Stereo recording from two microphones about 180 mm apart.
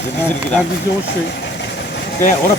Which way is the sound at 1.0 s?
70° left (ahead or behind).